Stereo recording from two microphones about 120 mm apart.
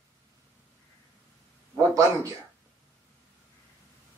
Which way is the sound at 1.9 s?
25° right (ahead or behind).